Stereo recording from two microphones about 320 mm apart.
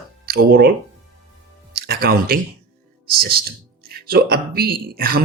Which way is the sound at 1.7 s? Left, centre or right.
Right.